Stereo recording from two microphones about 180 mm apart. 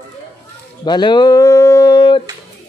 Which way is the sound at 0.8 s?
25° left (ahead or behind).